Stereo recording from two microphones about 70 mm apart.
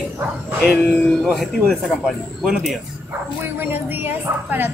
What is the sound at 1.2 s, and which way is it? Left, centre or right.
Speech, centre.